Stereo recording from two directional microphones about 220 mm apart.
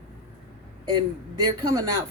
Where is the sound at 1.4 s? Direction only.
15° right (ahead or behind).